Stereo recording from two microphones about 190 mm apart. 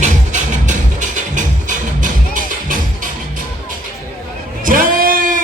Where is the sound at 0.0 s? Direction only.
40° right (ahead or behind).